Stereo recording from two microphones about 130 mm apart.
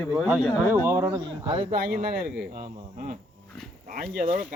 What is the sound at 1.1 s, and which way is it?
Speech, 35° right (ahead or behind).